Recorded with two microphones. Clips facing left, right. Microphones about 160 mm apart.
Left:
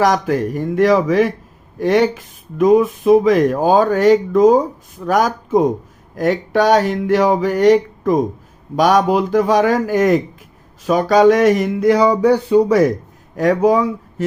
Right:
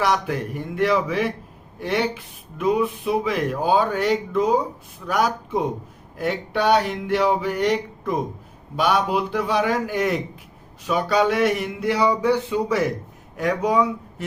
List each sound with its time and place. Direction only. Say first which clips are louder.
0.0 s speech: left 7 dB; 40° left (ahead or behind)